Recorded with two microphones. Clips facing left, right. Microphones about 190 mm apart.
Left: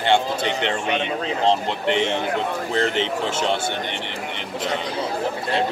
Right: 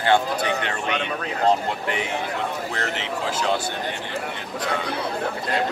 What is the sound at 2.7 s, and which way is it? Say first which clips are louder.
Speech: left 6 dB; 30° left (ahead or behind).